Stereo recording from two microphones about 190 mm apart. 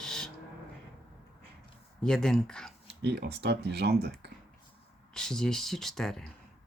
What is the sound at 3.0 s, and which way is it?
Speech, 60° right (ahead or behind).